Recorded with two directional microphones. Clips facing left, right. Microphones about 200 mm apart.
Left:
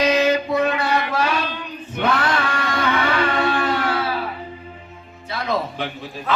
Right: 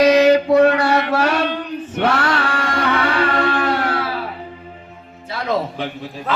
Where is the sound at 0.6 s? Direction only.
70° right (ahead or behind).